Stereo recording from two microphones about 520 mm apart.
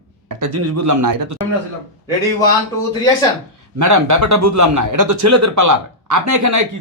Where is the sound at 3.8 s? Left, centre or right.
Right.